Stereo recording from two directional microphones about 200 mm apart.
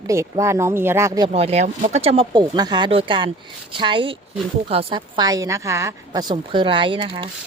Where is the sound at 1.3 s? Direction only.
30° right (ahead or behind).